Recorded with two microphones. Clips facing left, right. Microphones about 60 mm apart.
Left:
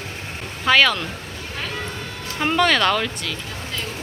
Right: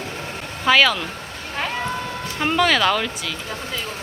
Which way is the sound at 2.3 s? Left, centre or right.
Centre.